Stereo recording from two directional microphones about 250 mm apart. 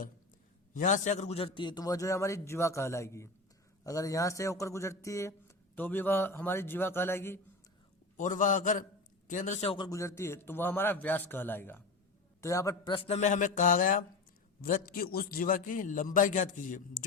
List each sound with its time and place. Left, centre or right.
0.7 s a man's voice: left; by 7.3 s centre
8.1 s a man's voice: left